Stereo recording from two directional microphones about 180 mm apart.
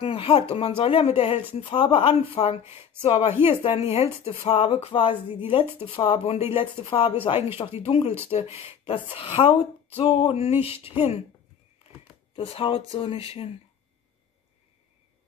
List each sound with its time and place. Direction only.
0.0 s speech: 30° left (ahead or behind)
12.4 s speech: 30° left (ahead or behind)